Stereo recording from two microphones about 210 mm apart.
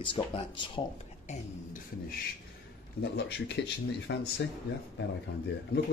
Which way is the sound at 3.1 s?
55° left (ahead or behind).